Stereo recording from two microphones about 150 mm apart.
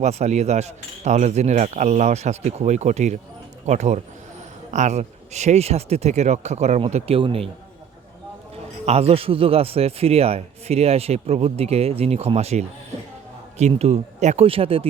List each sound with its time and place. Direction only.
0.0 s a man's voice: 50° right (ahead or behind)
8.9 s a man's voice: 40° right (ahead or behind)